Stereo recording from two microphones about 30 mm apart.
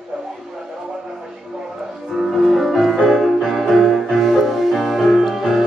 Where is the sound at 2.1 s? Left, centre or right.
Centre.